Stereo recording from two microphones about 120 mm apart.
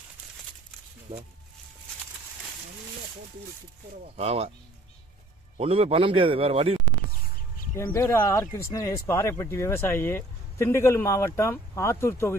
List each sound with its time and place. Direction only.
1.1 s a man's voice: 55° right (ahead or behind)
4.2 s speech: 60° right (ahead or behind)
5.5 s a man's voice: 55° right (ahead or behind)
7.9 s speech: 20° left (ahead or behind)